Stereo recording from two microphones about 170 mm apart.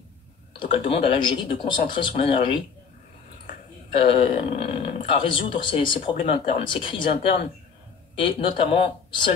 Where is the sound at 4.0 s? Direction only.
30° left (ahead or behind).